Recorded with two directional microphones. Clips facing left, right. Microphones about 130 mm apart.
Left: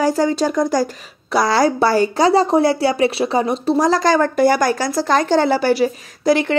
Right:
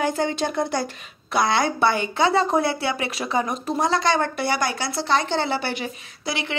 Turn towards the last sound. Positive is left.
turn(degrees=45)  # may be behind; listen again after turning